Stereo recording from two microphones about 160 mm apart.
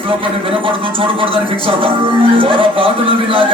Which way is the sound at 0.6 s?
35° right (ahead or behind).